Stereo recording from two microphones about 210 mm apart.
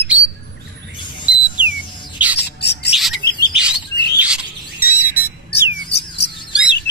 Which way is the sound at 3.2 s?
50° left (ahead or behind).